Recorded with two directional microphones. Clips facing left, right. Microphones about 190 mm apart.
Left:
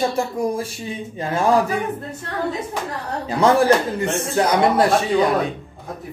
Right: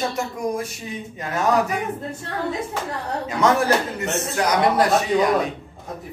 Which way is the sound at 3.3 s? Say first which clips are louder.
Left 4 dB; 30° left (ahead or behind).